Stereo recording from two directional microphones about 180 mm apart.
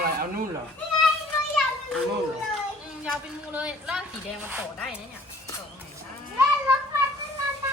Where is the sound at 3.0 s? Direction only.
5° right (ahead or behind).